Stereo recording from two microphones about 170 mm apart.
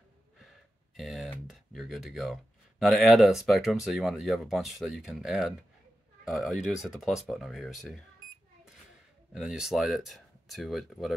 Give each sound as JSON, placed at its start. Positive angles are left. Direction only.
{"t": 0.9, "sound": "a sound", "side_deg": 0}
{"t": 1.5, "sound": "speech", "side_deg": 0}
{"t": 9.3, "sound": "speech", "side_deg": -5}